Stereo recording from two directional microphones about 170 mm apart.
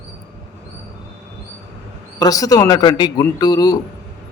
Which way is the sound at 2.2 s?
20° left (ahead or behind).